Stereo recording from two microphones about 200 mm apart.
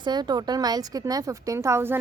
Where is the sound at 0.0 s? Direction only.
20° right (ahead or behind).